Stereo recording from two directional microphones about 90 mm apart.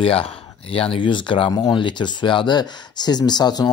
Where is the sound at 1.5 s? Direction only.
50° left (ahead or behind).